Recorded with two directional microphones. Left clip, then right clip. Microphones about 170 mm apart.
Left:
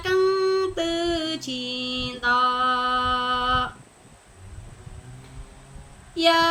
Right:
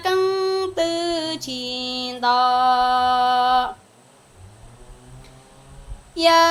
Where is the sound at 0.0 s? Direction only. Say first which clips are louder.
Right 1 dB; 20° left (ahead or behind).